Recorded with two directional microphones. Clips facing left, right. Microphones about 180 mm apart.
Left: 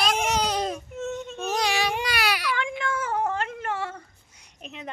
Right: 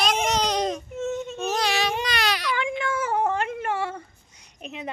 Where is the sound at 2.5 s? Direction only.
5° right (ahead or behind).